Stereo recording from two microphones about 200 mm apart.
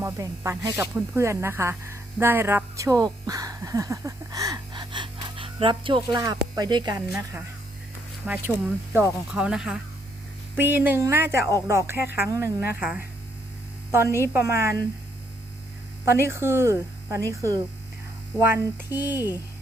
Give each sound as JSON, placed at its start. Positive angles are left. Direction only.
{"t": 0.0, "sound": "speech", "side_deg": -15}
{"t": 16.0, "sound": "speech", "side_deg": -10}
{"t": 19.1, "sound": "speech", "side_deg": 20}